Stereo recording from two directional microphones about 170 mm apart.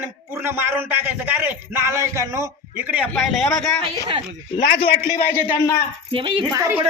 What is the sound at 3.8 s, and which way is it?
Speech, 30° right (ahead or behind).